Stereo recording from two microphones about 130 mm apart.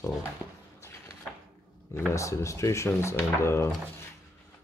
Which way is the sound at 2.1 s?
25° left (ahead or behind).